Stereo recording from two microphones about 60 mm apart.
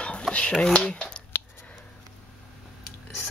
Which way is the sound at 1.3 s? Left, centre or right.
Left.